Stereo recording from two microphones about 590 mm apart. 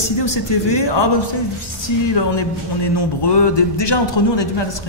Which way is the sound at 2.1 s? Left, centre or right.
Left.